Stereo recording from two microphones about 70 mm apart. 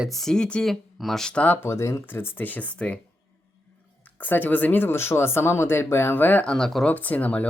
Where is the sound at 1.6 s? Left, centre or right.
Left.